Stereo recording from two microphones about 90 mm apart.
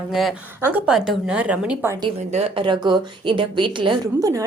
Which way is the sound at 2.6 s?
60° right (ahead or behind).